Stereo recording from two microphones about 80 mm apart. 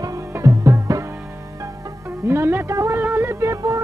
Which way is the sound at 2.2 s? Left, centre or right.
Right.